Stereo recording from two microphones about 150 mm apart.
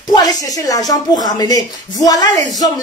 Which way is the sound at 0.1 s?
25° left (ahead or behind).